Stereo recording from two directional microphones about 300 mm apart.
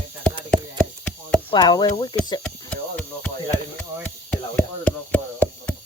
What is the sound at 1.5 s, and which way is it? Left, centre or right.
Speech, centre.